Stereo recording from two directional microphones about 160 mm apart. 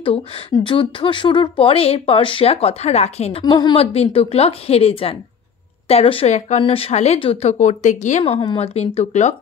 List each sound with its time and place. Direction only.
0.7 s speech: 30° left (ahead or behind)